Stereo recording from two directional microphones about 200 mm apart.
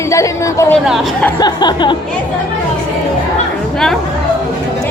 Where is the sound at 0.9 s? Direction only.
Centre (ahead or behind).